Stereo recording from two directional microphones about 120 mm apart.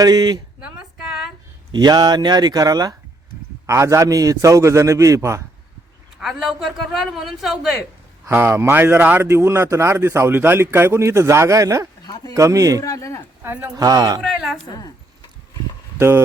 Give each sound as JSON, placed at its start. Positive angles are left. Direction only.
{"t": 0.0, "sound": "speech", "side_deg": -35}
{"t": 0.6, "sound": "a sound", "side_deg": -5}
{"t": 1.7, "sound": "a man's voice", "side_deg": -35}
{"t": 6.1, "sound": "a man's voice", "side_deg": -5}
{"t": 8.3, "sound": "a man's voice", "side_deg": -20}
{"t": 12.0, "sound": "a sound", "side_deg": 35}
{"t": 12.3, "sound": "a man's voice", "side_deg": -25}
{"t": 12.8, "sound": "speech", "side_deg": 25}
{"t": 13.4, "sound": "speech", "side_deg": -15}
{"t": 13.7, "sound": "speech", "side_deg": -30}
{"t": 14.2, "sound": "a man's voice", "side_deg": 0}
{"t": 16.0, "sound": "speech", "side_deg": -20}